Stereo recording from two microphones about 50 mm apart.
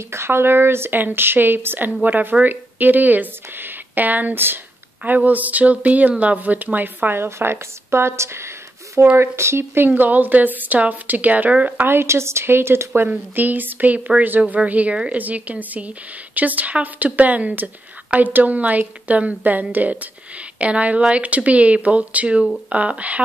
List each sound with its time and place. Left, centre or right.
0.1 s speech: right
7.2 s a woman's voice: right
9.8 s speech: right
11.9 s a woman's voice: right
13.1 s a woman's voice: right